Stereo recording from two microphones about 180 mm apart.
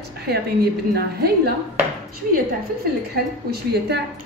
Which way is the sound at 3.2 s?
60° right (ahead or behind).